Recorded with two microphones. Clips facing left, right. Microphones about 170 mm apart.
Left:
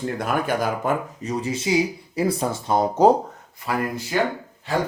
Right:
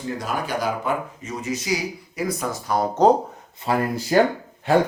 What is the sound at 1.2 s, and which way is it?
Speech, 35° left (ahead or behind).